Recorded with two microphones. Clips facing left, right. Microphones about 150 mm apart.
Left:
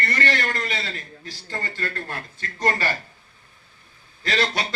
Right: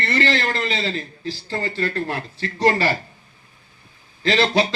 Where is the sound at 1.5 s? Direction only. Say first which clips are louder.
Right 6 dB; 30° right (ahead or behind).